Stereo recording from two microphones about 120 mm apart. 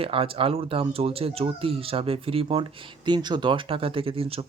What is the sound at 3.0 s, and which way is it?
Speech, 40° right (ahead or behind).